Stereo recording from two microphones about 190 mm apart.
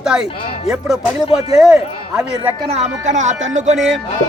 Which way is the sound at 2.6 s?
35° right (ahead or behind).